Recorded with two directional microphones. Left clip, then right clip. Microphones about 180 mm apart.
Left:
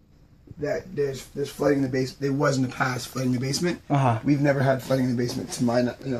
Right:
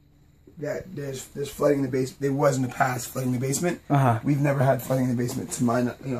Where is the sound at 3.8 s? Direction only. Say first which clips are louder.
Right 1 dB; 30° right (ahead or behind).